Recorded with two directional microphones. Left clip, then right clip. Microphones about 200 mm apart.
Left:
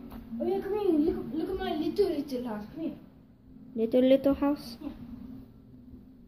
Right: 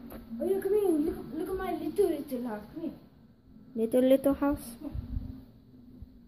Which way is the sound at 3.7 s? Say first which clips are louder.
Left 1 dB; 5° right (ahead or behind).